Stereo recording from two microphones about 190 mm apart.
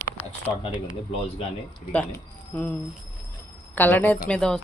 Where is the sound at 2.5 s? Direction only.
10° left (ahead or behind).